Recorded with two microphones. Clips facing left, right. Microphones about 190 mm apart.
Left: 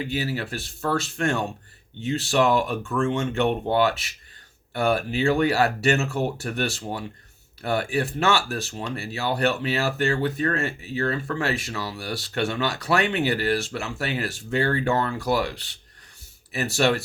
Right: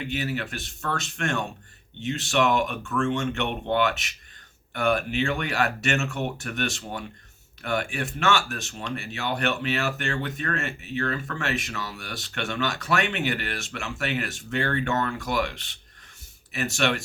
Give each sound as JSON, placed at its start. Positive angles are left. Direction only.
{"t": 0.0, "sound": "speech", "side_deg": 35}